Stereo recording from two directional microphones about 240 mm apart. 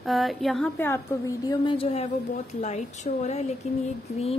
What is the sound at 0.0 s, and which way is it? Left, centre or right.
A woman's voice, centre.